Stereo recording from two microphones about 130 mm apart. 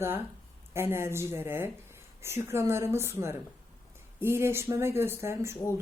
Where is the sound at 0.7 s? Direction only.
20° right (ahead or behind).